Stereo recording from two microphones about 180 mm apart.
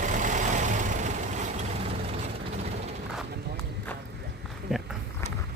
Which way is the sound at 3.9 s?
10° left (ahead or behind).